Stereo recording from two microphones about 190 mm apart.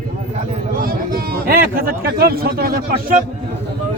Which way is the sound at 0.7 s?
50° right (ahead or behind).